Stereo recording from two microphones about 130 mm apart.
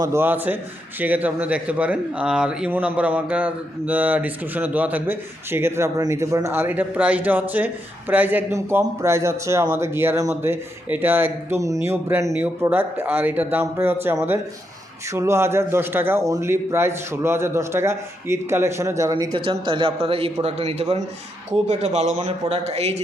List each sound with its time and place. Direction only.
0.0 s a man's voice: 20° right (ahead or behind)
19.1 s a man's voice: 35° right (ahead or behind); by 23.0 s 55° right (ahead or behind)